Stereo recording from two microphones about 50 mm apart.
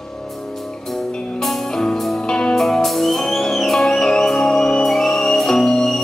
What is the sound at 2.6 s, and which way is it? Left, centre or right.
Music, centre.